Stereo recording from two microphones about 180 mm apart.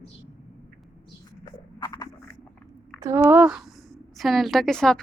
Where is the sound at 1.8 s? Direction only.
20° left (ahead or behind).